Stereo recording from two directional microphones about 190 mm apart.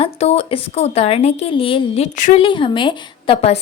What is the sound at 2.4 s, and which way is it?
A woman's voice, 25° left (ahead or behind).